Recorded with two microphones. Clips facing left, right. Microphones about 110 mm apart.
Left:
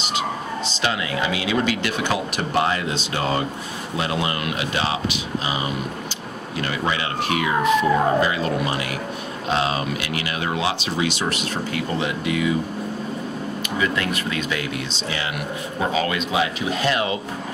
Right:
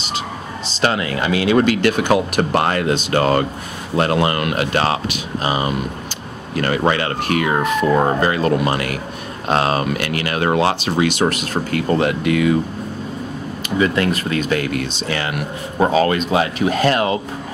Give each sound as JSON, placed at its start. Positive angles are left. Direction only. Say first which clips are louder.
{"t": 0.7, "sound": "speech", "louder": "right 7 dB", "side_deg": -45}
{"t": 13.7, "sound": "speech", "louder": "right 7 dB", "side_deg": -40}
{"t": 15.8, "sound": "speech", "louder": "right 8 dB", "side_deg": -40}